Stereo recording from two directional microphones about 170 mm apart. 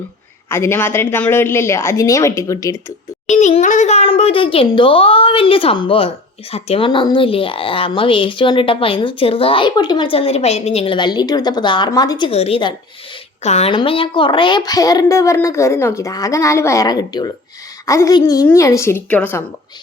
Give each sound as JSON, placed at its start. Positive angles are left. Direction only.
{"t": 0.4, "sound": "a woman's voice", "side_deg": 15}
{"t": 3.2, "sound": "a child's voice", "side_deg": 45}